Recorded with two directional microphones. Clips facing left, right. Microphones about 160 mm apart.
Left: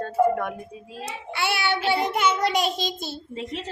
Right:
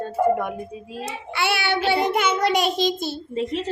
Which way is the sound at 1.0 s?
70° right (ahead or behind).